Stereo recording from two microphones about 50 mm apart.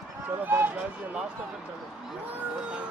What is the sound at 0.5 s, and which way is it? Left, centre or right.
Speech, right.